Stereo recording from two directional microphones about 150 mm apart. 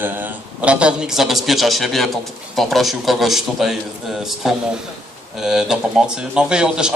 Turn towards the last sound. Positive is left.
turn(degrees=-5)  # may be behind; listen again after turning